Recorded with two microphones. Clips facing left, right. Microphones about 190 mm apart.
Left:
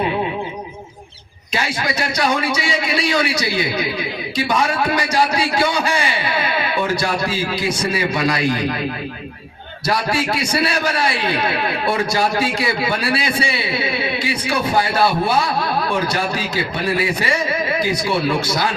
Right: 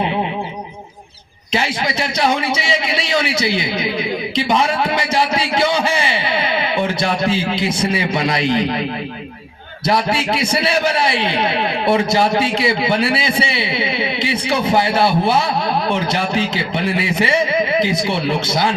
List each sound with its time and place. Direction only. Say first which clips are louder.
1.5 s a man's voice: right 2 dB; 25° right (ahead or behind)
9.8 s a man's voice: right 2 dB; 25° right (ahead or behind)